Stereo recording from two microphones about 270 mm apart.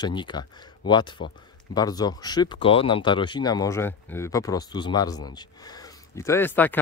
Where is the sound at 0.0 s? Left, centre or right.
Centre.